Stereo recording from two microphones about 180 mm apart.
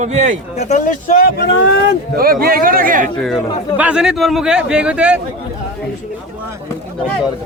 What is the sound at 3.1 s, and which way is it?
A man's voice, centre (ahead or behind).